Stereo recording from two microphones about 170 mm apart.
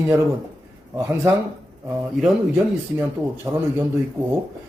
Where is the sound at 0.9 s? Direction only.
20° right (ahead or behind).